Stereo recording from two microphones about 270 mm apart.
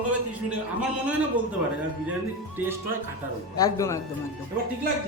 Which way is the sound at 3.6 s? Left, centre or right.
Centre.